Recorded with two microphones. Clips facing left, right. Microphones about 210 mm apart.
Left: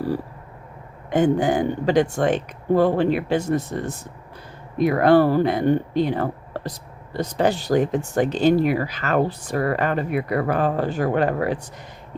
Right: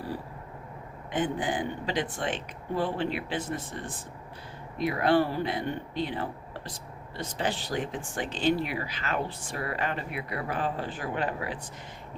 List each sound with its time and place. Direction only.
1.1 s speech: 45° left (ahead or behind)
6.2 s a sound: 65° left (ahead or behind)
7.1 s speech: 45° left (ahead or behind)